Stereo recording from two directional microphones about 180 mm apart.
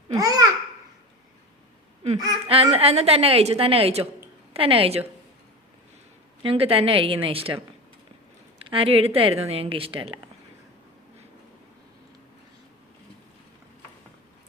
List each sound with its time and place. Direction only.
0.2 s babbling: 20° right (ahead or behind)
2.5 s a woman's voice: 30° right (ahead or behind)
6.4 s a woman's voice: 30° right (ahead or behind)
8.6 s a woman's voice: 30° right (ahead or behind)